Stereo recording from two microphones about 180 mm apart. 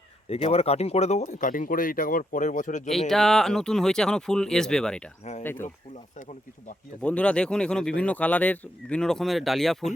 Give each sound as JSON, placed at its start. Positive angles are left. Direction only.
{"t": 0.3, "sound": "speech", "side_deg": 35}
{"t": 3.1, "sound": "speech", "side_deg": 0}
{"t": 6.1, "sound": "speech", "side_deg": 45}
{"t": 7.0, "sound": "speech", "side_deg": 5}